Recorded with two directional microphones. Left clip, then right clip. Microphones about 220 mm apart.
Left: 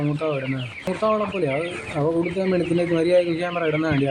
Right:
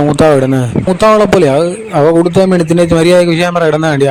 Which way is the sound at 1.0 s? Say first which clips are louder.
Right 15 dB; 45° right (ahead or behind).